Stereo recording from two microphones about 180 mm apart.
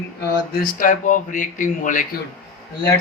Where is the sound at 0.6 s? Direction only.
50° left (ahead or behind).